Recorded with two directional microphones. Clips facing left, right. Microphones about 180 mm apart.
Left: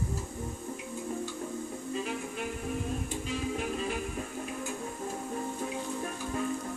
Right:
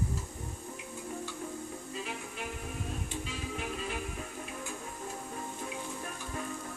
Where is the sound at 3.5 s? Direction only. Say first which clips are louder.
Left 5 dB; 40° left (ahead or behind).